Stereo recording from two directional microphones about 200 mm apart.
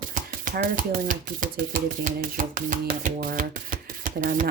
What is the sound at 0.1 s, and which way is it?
Speech, 45° right (ahead or behind).